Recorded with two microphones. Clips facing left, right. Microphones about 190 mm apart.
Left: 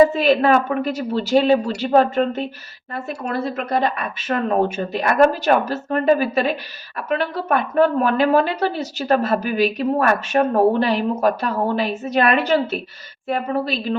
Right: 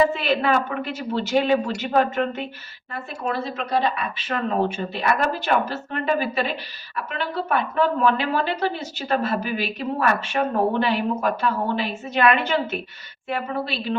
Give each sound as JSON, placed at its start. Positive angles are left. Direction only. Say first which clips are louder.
{"t": 0.1, "sound": "speech", "louder": "left 6 dB", "side_deg": 40}